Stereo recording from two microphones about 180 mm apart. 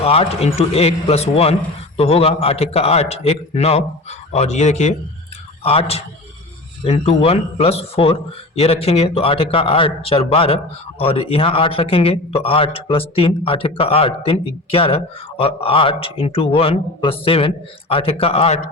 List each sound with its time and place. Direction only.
0.0 s speech: 35° left (ahead or behind)